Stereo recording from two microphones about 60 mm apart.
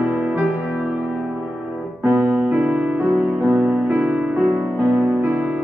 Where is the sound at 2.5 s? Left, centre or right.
Right.